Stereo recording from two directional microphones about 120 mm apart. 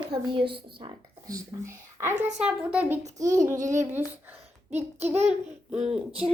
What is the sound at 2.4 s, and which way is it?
Child singing, 10° right (ahead or behind).